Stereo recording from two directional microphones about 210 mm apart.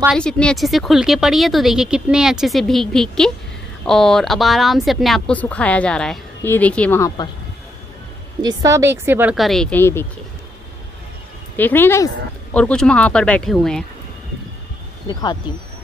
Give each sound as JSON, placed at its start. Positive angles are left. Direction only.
{"t": 0.0, "sound": "speech", "side_deg": 0}
{"t": 8.4, "sound": "speech", "side_deg": -15}
{"t": 11.5, "sound": "a woman's voice", "side_deg": 10}
{"t": 15.0, "sound": "speech", "side_deg": 20}